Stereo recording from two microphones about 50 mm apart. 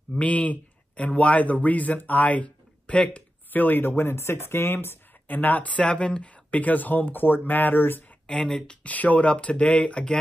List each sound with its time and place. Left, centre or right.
0.2 s speech: left
3.5 s speech: left
8.3 s speech: centre
8.9 s speech: left